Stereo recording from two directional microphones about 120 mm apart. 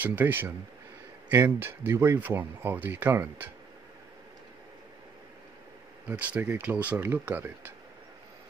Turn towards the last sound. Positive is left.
turn(degrees=-15)  # may be behind; listen again after turning